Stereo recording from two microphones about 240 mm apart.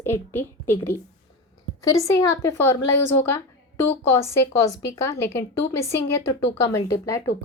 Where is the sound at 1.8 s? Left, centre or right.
Centre.